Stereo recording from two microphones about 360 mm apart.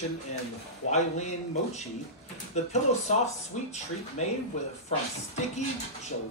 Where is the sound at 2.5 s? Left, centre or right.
Centre.